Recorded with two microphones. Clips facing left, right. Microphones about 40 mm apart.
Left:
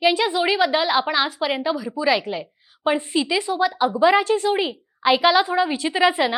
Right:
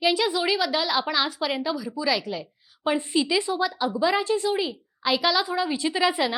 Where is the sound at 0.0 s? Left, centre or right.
Centre.